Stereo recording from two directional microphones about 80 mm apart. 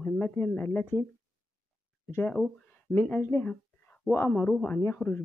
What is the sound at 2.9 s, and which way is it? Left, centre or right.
Speech, left.